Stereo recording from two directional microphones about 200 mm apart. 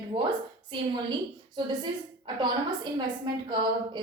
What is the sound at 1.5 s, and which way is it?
Speech, 20° right (ahead or behind).